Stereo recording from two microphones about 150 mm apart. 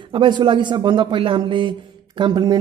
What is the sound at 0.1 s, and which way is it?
A man's voice, 30° right (ahead or behind).